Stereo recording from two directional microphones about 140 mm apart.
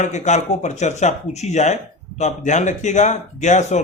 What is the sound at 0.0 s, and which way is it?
Speech, 55° left (ahead or behind).